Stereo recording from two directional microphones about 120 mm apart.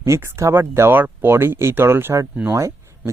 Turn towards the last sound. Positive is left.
turn(degrees=-25)  # may be behind; listen again after turning